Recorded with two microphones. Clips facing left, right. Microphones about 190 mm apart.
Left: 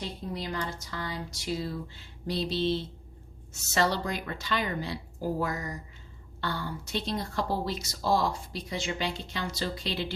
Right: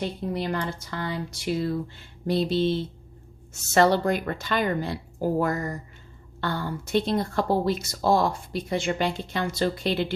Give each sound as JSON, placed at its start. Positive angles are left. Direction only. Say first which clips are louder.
{"t": 0.0, "sound": "speech", "louder": "right 7 dB", "side_deg": -55}